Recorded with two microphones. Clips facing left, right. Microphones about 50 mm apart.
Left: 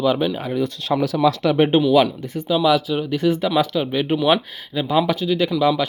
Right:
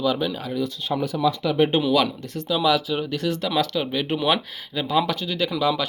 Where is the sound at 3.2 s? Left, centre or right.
Centre.